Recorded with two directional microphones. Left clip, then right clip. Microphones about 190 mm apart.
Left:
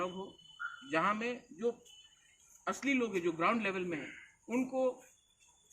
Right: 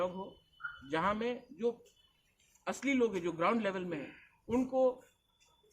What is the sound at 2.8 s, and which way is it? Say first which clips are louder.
Speech: right 2 dB; 20° right (ahead or behind).